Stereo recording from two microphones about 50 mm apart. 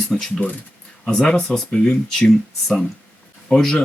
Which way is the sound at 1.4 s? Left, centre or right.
Centre.